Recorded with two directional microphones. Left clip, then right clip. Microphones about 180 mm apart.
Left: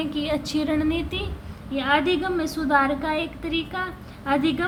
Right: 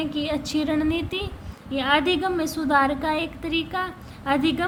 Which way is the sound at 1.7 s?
35° right (ahead or behind).